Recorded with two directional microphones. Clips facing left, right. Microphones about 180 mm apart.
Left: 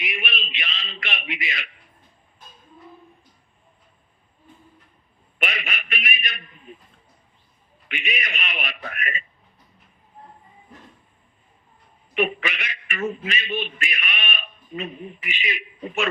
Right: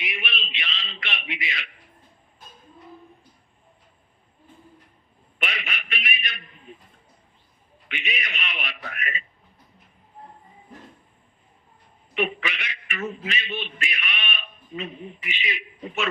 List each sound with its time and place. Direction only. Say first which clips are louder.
0.0 s a sound: left 2 dB; 45° left (ahead or behind)
5.4 s a sound: left 3 dB; 45° left (ahead or behind)
7.9 s a man's voice: left 2 dB; 50° left (ahead or behind)
12.1 s a man's voice: left 3 dB; 50° left (ahead or behind)
13.7 s bleat: left 2 dB; 50° left (ahead or behind)
15.3 s a man's voice: left 1 dB; 50° left (ahead or behind)